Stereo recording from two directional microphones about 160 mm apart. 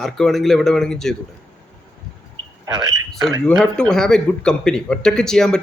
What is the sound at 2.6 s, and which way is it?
Speech, 20° right (ahead or behind).